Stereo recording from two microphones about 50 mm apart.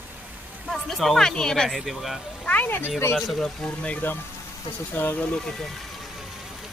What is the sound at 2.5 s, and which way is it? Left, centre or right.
Speech, left.